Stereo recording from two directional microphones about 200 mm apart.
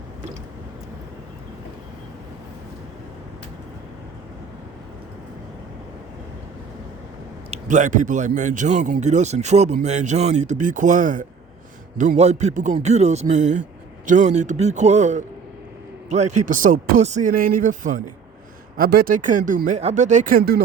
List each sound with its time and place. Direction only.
7.5 s a man's voice: 40° right (ahead or behind)